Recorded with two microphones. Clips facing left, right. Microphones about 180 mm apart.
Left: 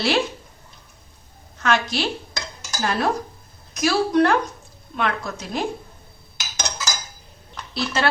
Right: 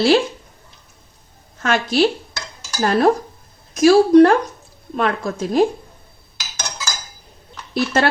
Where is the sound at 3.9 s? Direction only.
35° right (ahead or behind).